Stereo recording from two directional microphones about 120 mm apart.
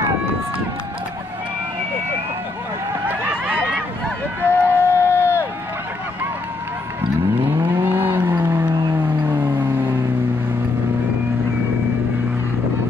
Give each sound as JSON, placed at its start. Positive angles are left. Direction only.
{"t": 3.1, "sound": "run", "side_deg": -10}
{"t": 4.5, "sound": "crowd", "side_deg": 20}
{"t": 7.7, "sound": "vehicle", "side_deg": -20}